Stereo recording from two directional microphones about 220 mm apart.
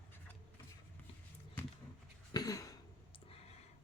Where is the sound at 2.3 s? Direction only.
15° left (ahead or behind).